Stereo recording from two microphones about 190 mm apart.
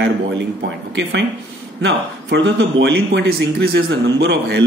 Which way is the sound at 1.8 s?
70° right (ahead or behind).